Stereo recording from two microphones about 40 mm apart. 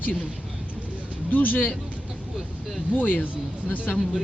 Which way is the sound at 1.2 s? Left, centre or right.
Left.